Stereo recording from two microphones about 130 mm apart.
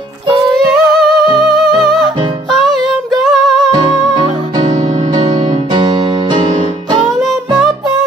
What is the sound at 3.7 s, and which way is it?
Music, 30° right (ahead or behind).